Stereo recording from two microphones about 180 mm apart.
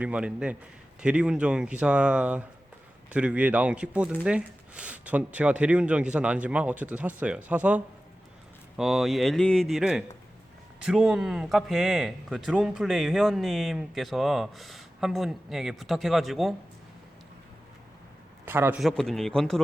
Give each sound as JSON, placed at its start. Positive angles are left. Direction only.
{"t": 0.0, "sound": "speech", "side_deg": -5}
{"t": 18.4, "sound": "a man's voice", "side_deg": -10}
{"t": 18.8, "sound": "speech", "side_deg": 0}